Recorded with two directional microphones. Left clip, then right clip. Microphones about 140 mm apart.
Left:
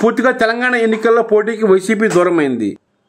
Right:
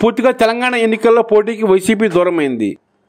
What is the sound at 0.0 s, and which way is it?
A man's voice, 30° right (ahead or behind).